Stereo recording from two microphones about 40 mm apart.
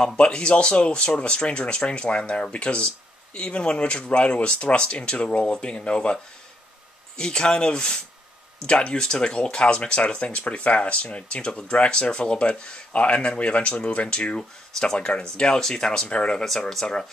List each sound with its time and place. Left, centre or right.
0.0 s speech: left
7.2 s speech: left
16.4 s speech: centre